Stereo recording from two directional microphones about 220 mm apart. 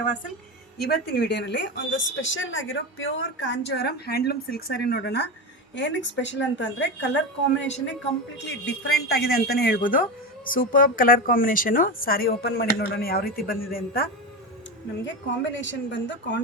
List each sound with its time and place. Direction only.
0.8 s a woman's voice: 45° left (ahead or behind)
8.6 s speech: 50° left (ahead or behind)
15.0 s a woman's voice: 55° left (ahead or behind)